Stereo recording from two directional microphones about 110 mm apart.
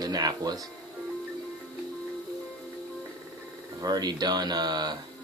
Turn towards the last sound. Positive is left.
turn(degrees=-40)  # may be behind; listen again after turning